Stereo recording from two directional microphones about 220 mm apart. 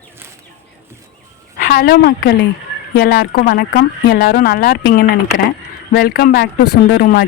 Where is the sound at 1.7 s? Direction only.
45° left (ahead or behind).